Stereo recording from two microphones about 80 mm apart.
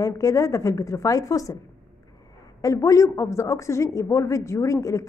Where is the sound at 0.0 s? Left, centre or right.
Left.